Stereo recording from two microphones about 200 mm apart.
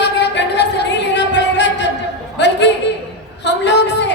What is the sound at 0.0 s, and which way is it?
Music, 60° left (ahead or behind).